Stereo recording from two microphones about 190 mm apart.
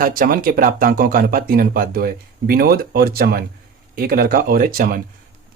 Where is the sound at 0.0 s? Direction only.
50° right (ahead or behind).